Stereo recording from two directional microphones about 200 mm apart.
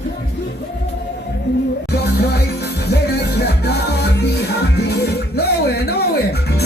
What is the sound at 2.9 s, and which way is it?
Music, 55° left (ahead or behind).